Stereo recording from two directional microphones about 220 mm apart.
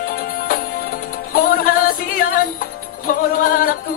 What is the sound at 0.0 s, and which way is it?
Music, 45° left (ahead or behind).